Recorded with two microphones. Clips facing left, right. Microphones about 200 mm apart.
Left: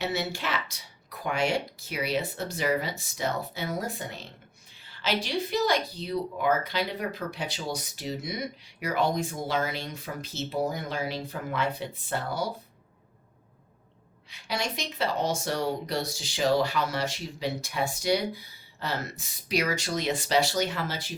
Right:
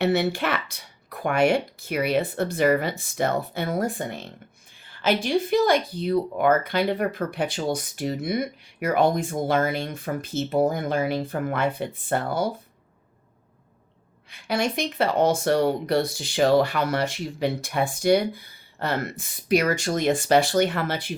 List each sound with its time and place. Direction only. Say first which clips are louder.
0.0 s speech: right 8 dB; 60° right (ahead or behind)
14.3 s speech: right 7 dB; 55° right (ahead or behind)